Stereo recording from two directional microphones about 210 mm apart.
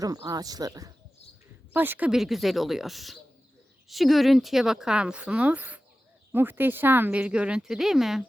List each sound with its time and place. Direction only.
0.0 s speech: 15° right (ahead or behind); by 8.2 s centre (ahead or behind)